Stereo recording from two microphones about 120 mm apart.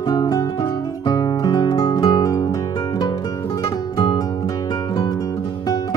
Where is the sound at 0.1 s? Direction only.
30° left (ahead or behind).